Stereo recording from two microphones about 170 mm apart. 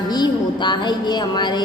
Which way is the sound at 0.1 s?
25° left (ahead or behind).